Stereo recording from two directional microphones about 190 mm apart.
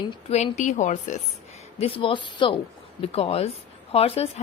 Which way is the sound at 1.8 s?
30° left (ahead or behind).